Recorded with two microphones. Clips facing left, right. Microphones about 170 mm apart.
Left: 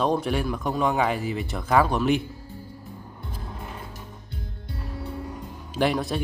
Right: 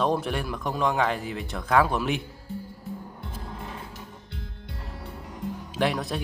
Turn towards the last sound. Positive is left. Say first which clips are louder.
# left 2 dB
turn(degrees=0)  # may be behind; listen again after turning